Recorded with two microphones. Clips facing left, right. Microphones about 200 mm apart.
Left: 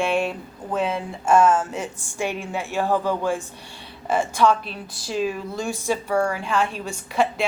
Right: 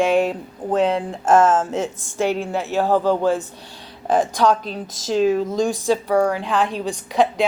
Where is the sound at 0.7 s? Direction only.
85° right.